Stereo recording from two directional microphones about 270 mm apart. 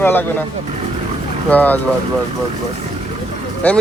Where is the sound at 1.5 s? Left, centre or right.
Centre.